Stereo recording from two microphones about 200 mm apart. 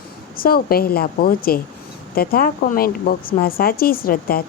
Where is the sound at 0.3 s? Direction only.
50° left (ahead or behind).